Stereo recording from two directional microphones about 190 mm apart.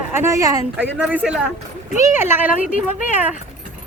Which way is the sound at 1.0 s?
5° right (ahead or behind).